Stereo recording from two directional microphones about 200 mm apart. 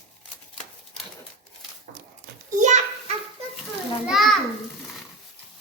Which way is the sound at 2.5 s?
35° right (ahead or behind).